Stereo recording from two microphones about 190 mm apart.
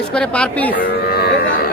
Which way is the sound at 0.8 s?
55° left (ahead or behind).